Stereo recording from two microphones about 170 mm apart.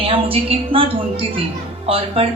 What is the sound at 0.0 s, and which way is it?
A woman's voice, 35° right (ahead or behind).